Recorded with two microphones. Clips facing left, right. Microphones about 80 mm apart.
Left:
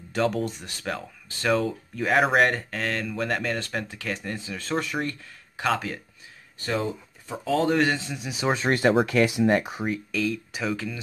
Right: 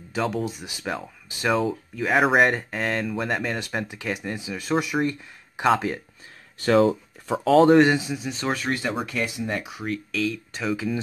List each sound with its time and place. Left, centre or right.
0.1 s speech: centre; by 5.9 s right
6.6 s speech: right
7.7 s speech: centre
8.1 s speech: centre
8.6 s speech: left
8.9 s speech: left
9.5 s speech: left
9.8 s speech: centre